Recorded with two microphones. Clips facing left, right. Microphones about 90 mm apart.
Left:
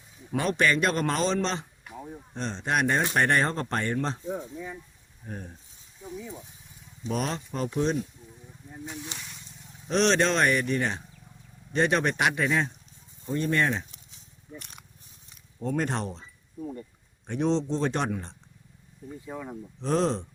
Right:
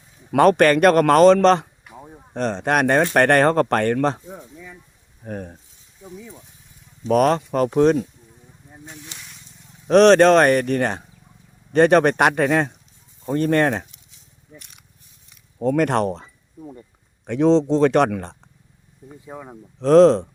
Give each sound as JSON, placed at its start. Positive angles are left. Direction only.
{"t": 0.3, "sound": "speech", "side_deg": -60}
{"t": 4.3, "sound": "speech", "side_deg": 25}
{"t": 5.2, "sound": "speech", "side_deg": -60}
{"t": 6.1, "sound": "speech", "side_deg": 10}
{"t": 7.1, "sound": "speech", "side_deg": -60}
{"t": 9.1, "sound": "vehicle", "side_deg": 0}
{"t": 9.8, "sound": "speech", "side_deg": -60}
{"t": 14.6, "sound": "wild animals", "side_deg": 40}
{"t": 15.7, "sound": "speech", "side_deg": -70}
{"t": 17.2, "sound": "speech", "side_deg": -90}
{"t": 19.2, "sound": "speech", "side_deg": -15}
{"t": 19.8, "sound": "speech", "side_deg": -90}